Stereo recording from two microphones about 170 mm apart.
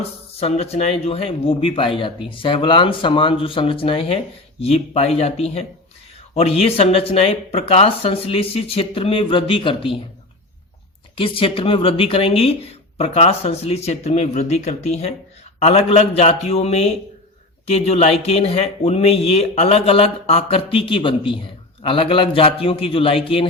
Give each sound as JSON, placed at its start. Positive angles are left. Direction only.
{"t": 0.3, "sound": "speech", "side_deg": 35}
{"t": 11.1, "sound": "speech", "side_deg": 30}